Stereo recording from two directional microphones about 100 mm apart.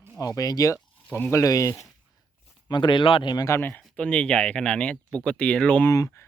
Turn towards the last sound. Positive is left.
turn(degrees=30)  # may be behind; listen again after turning